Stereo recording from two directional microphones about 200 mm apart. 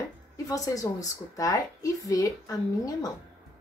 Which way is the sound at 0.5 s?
15° left (ahead or behind).